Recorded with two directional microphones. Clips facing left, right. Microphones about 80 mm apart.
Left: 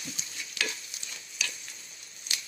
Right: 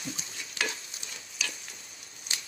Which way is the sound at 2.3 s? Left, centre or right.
Right.